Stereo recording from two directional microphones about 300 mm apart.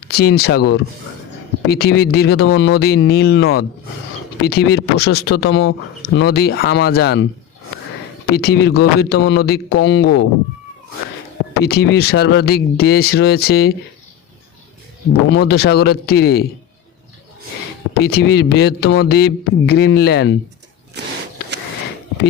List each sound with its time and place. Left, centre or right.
0.1 s speech: left
8.3 s speech: left
11.5 s speech: left
15.4 s speech: left
17.9 s speech: left